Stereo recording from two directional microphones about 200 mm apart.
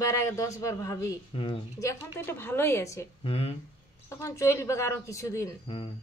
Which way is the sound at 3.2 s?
30° left (ahead or behind).